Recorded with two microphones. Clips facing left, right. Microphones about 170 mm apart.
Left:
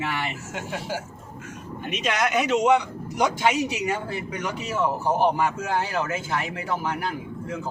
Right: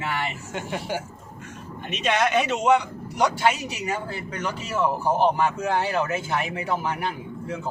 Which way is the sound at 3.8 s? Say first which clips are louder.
Left 2 dB; 15° left (ahead or behind).